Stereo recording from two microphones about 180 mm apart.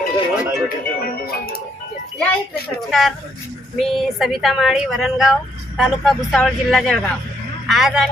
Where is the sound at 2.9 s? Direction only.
Centre (ahead or behind).